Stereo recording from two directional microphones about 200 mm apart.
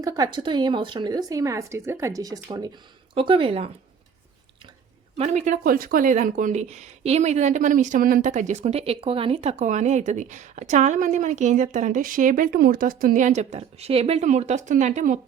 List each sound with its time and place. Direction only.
0.0 s a woman's voice: 20° right (ahead or behind)
5.1 s speech: 35° right (ahead or behind)